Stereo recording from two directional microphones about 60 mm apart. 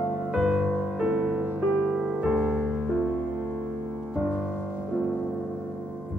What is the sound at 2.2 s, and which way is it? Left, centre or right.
Music, centre.